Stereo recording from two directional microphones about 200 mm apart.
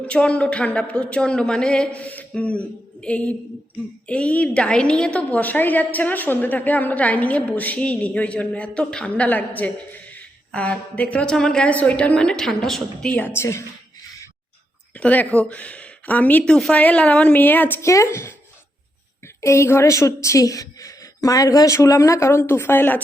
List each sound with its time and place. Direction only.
0.0 s a woman's voice: 5° left (ahead or behind)
14.9 s a woman's voice: 5° left (ahead or behind)
19.4 s a woman's voice: 15° left (ahead or behind)